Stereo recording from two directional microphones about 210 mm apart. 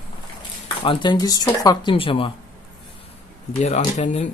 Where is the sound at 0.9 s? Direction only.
20° left (ahead or behind).